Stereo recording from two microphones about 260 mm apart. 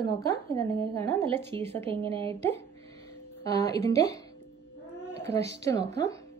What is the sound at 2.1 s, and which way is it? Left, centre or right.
Speech, right.